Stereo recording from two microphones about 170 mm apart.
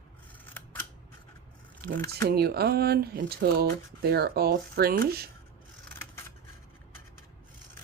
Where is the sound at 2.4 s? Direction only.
65° right (ahead or behind).